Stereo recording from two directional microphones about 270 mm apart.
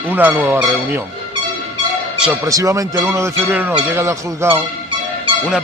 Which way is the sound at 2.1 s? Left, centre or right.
Centre.